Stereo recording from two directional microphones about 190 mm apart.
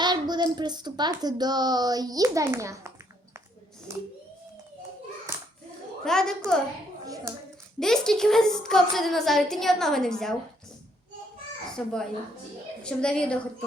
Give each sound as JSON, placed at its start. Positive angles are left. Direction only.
{"t": 0.0, "sound": "a woman's voice", "side_deg": -25}
{"t": 5.3, "sound": "hands", "side_deg": -15}
{"t": 6.1, "sound": "a woman's voice", "side_deg": 5}
{"t": 7.8, "sound": "a woman's voice", "side_deg": 0}
{"t": 11.7, "sound": "a woman's voice", "side_deg": 5}